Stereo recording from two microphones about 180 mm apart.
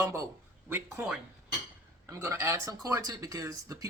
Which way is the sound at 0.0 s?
15° right (ahead or behind).